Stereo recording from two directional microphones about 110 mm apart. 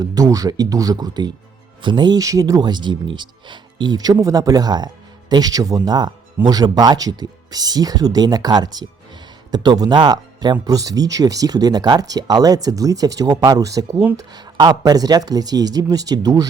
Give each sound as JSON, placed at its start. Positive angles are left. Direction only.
{"t": 0.0, "sound": "speech", "side_deg": -35}